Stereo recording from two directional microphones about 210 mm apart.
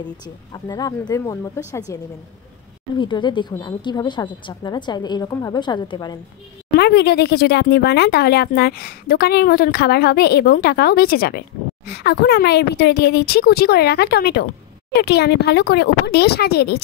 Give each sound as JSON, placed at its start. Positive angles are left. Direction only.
{"t": 0.5, "sound": "speech", "side_deg": 20}
{"t": 3.0, "sound": "a woman's voice", "side_deg": 20}
{"t": 6.8, "sound": "speech", "side_deg": 50}